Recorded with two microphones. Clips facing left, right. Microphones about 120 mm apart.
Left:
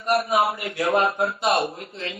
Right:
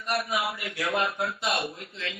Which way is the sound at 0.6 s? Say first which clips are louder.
Left 7 dB; 35° left (ahead or behind).